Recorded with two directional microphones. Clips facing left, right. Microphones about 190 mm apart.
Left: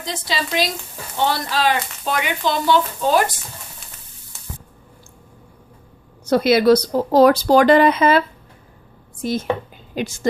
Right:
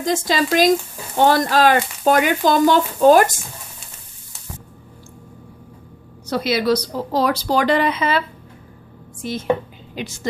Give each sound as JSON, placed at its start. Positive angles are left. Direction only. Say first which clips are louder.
{"t": 0.0, "sound": "speech", "louder": "right 7 dB", "side_deg": -45}
{"t": 6.2, "sound": "speech", "louder": "left 5 dB", "side_deg": 50}
{"t": 9.2, "sound": "a woman's voice", "louder": "right 1 dB", "side_deg": 45}